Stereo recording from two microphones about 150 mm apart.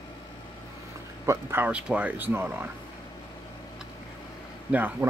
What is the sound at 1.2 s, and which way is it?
Speech, 15° right (ahead or behind).